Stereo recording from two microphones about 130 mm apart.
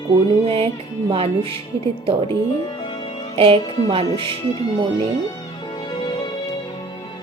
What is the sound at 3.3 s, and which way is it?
Music, 45° right (ahead or behind).